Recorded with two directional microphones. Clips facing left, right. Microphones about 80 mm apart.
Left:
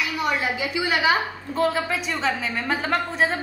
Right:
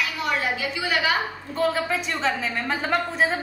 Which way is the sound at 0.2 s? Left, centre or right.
Centre.